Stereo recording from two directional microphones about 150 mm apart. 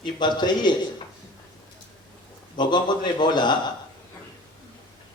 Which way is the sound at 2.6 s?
30° left (ahead or behind).